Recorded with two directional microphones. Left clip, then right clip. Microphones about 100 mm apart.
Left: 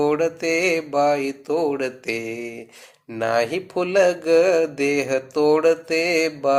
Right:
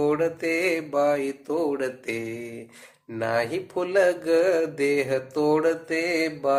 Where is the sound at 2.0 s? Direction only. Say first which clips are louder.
Left 4 dB; 35° left (ahead or behind).